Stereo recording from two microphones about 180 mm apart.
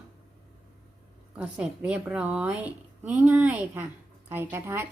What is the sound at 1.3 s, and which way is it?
A woman's voice, 5° right (ahead or behind).